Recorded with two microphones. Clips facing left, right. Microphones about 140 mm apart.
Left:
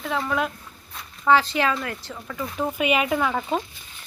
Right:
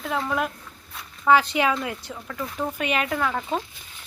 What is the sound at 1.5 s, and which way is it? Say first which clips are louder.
Speech: right 1 dB; 15° right (ahead or behind).